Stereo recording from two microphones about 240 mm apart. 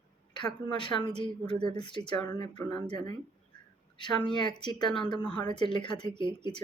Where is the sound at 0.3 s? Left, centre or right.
Centre.